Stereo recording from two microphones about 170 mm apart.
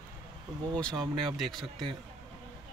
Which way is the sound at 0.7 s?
5° left (ahead or behind).